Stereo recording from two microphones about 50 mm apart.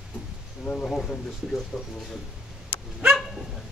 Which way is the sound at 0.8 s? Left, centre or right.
Centre.